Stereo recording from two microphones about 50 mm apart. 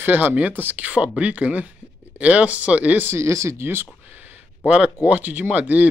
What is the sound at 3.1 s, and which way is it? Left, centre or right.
Speech, right.